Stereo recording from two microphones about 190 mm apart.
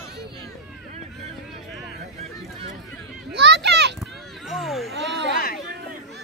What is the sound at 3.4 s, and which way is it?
Children playing, 65° right (ahead or behind).